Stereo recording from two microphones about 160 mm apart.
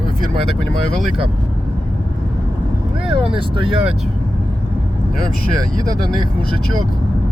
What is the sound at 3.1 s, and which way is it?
Speech, 35° right (ahead or behind).